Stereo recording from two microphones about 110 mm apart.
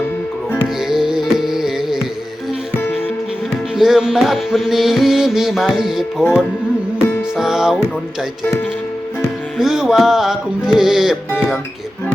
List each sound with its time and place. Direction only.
0.8 s music: 5° right (ahead or behind)
3.8 s music: 5° right (ahead or behind)
7.3 s music: 5° right (ahead or behind)
9.6 s music: 5° right (ahead or behind)